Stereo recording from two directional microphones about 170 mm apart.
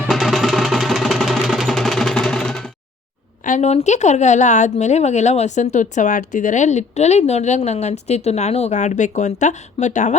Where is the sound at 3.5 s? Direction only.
40° left (ahead or behind).